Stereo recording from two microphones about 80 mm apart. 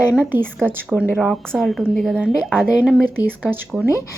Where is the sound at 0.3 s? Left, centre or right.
Right.